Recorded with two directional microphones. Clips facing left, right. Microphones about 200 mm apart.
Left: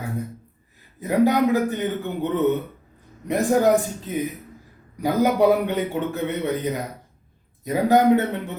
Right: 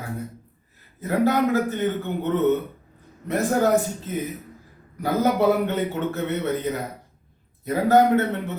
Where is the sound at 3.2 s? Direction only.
15° left (ahead or behind).